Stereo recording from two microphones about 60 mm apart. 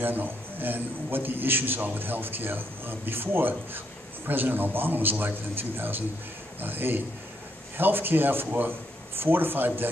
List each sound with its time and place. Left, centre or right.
0.0 s a man's voice: right